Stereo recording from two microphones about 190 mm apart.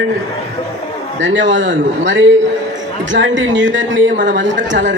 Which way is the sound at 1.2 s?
75° right (ahead or behind).